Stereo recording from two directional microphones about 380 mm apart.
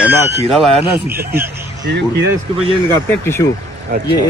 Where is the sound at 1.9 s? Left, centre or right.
Right.